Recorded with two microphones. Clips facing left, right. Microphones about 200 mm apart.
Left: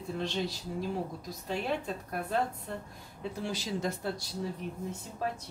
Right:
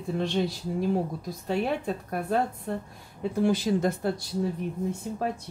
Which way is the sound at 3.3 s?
55° right (ahead or behind).